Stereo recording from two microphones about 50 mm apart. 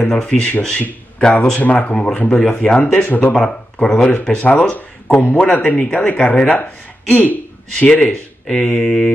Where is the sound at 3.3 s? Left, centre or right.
Centre; by 5.1 s left.